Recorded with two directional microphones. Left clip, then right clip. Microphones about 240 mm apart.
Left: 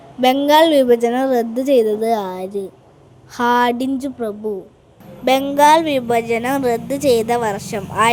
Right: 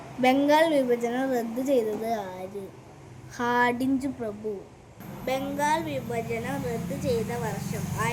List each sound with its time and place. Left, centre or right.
0.2 s a woman's voice: left
5.2 s a woman's voice: left